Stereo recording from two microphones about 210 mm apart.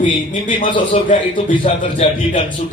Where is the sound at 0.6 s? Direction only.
25° left (ahead or behind).